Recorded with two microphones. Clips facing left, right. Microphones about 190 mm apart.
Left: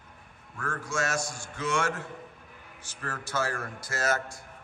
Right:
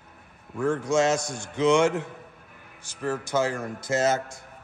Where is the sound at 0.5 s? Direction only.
20° right (ahead or behind).